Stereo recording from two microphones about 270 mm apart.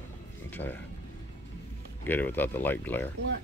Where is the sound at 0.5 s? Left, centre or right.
Centre.